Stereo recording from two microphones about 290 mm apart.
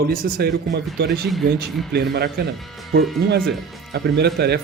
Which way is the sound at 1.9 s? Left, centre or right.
Right.